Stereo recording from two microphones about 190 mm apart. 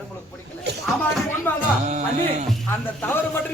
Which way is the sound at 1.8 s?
35° right (ahead or behind).